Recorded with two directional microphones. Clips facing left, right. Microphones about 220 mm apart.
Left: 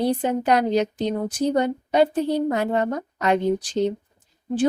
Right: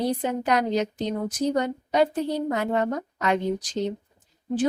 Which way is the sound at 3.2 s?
30° left (ahead or behind).